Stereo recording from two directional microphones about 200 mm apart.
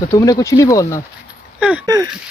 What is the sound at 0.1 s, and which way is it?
Speech, 15° left (ahead or behind).